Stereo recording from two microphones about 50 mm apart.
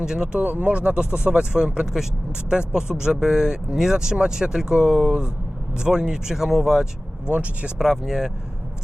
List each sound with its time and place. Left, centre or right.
0.0 s speech: centre
0.4 s speech: right; by 6.8 s centre
7.3 s speech: right
7.8 s speech: centre